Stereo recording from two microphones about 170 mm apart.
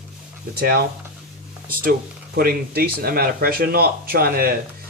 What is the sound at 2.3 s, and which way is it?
Speech, 60° right (ahead or behind).